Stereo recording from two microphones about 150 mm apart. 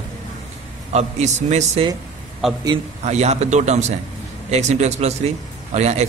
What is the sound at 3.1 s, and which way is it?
A man's voice, 45° right (ahead or behind).